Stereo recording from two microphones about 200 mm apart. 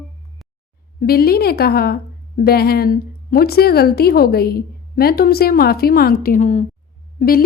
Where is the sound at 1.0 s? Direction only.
50° left (ahead or behind).